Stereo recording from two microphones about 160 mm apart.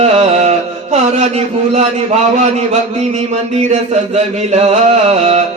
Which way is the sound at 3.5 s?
40° right (ahead or behind).